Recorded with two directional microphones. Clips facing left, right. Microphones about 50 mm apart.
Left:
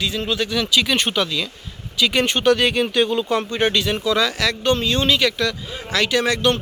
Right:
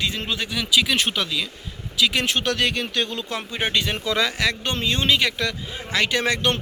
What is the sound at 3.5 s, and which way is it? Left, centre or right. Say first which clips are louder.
Speech: left 6 dB; centre.